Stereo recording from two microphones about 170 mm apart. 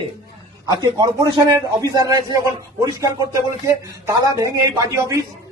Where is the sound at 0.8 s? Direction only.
25° right (ahead or behind).